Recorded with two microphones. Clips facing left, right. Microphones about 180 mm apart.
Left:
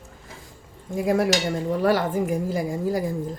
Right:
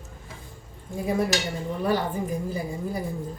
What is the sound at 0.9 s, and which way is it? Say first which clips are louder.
A woman's voice: left 4 dB; 85° left.